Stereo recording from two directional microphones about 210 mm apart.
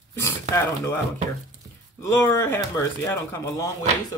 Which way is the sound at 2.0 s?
15° left (ahead or behind).